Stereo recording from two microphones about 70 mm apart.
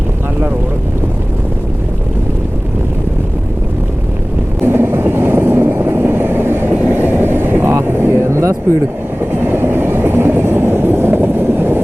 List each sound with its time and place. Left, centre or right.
4.6 s vehicle: right
9.3 s vehicle: right